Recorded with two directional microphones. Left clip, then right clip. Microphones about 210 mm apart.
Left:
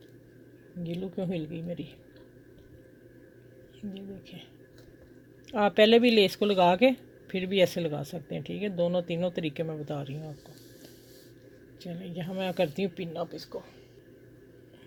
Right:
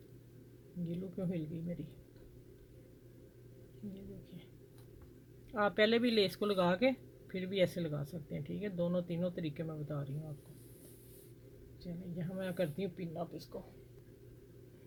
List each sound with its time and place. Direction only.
0.9 s speech: 15° left (ahead or behind)
5.5 s speech: 25° left (ahead or behind)
11.8 s speech: 25° left (ahead or behind)